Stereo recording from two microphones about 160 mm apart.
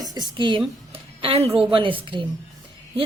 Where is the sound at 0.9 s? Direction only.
35° right (ahead or behind).